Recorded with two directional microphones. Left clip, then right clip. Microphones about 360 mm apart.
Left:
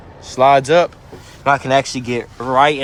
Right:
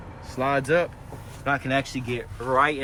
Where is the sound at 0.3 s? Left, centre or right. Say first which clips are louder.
Left 12 dB; centre.